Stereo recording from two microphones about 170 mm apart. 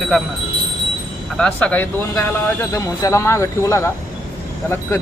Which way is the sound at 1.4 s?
5° left (ahead or behind).